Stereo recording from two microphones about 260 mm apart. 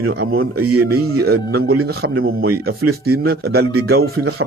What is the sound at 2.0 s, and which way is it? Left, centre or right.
Speech, right.